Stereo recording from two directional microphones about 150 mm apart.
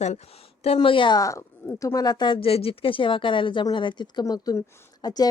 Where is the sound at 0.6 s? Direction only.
40° left (ahead or behind).